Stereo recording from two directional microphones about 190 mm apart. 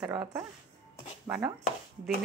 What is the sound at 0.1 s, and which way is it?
Speech, 20° right (ahead or behind).